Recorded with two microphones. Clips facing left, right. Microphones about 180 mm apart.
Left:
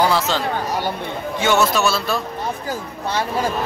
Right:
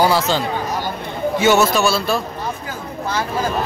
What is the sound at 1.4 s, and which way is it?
Speech, 5° right (ahead or behind).